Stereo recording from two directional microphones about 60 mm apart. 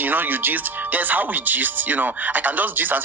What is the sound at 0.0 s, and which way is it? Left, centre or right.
Speech, right.